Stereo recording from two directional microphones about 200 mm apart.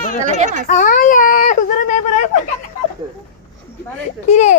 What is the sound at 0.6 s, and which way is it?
Speech, 45° left (ahead or behind).